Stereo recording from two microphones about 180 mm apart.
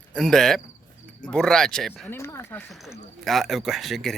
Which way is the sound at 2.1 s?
15° left (ahead or behind).